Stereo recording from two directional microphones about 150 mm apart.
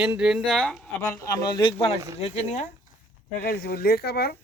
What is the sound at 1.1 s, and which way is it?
Speech, 20° left (ahead or behind).